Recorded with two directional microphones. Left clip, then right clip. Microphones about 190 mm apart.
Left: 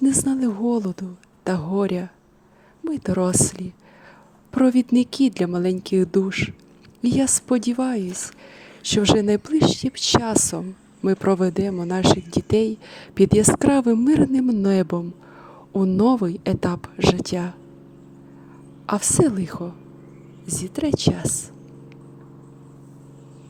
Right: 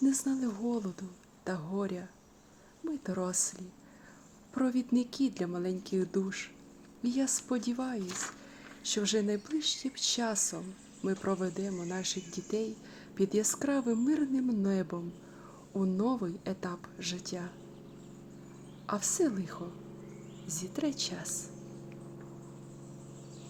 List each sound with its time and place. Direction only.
0.0 s speech: 40° left (ahead or behind)
18.9 s speech: 40° left (ahead or behind)